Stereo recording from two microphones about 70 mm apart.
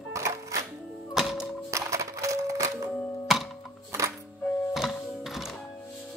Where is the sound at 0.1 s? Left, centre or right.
Right.